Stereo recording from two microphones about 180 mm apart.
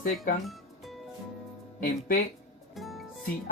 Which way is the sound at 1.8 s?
50° left (ahead or behind).